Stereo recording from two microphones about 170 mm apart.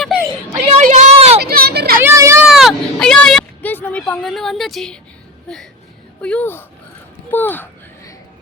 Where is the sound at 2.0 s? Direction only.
15° right (ahead or behind).